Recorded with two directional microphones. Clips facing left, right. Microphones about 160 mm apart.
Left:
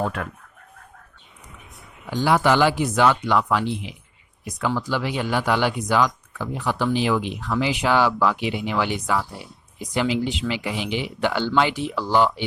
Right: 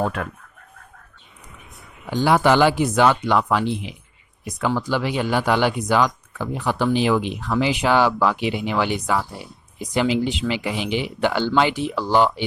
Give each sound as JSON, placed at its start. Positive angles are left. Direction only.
{"t": 2.2, "sound": "speech", "side_deg": -25}